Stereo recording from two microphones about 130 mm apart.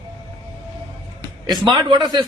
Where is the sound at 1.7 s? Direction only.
35° right (ahead or behind).